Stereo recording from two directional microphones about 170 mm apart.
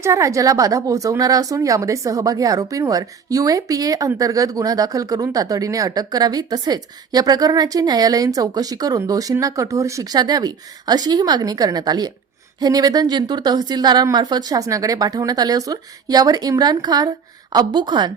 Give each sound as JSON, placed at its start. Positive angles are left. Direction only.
{"t": 0.0, "sound": "speech", "side_deg": -15}